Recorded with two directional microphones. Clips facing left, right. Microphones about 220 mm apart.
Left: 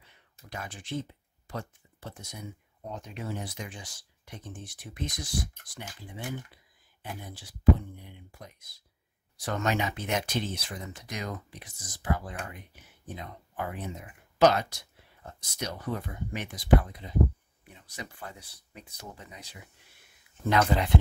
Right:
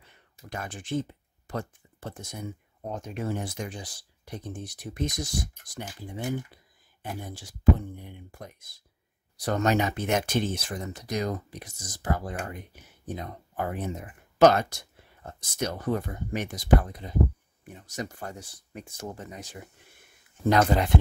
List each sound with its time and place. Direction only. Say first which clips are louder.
0.0 s a sound: right 5 dB; 50° right (ahead or behind)
1.5 s speech: right 4 dB; 50° right (ahead or behind)
9.4 s speech: right 5 dB; 40° right (ahead or behind)